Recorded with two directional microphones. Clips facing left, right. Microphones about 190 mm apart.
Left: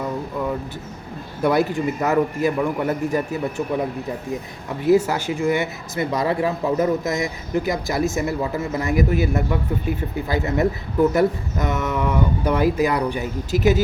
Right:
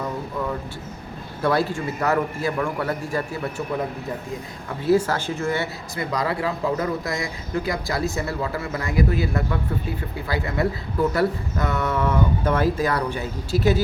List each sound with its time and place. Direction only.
1.4 s speech: 15° left (ahead or behind)
4.8 s speech: 15° left (ahead or behind)